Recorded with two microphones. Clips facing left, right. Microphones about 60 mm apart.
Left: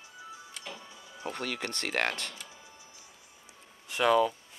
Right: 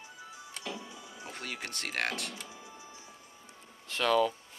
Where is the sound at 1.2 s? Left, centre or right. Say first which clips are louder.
Left 6 dB; left.